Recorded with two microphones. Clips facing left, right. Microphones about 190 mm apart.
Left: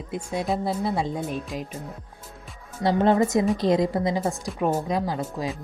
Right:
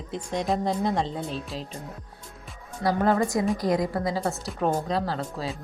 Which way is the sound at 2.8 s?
25° left (ahead or behind).